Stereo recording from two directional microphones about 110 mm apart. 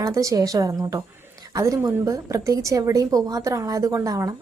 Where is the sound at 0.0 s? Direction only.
30° right (ahead or behind).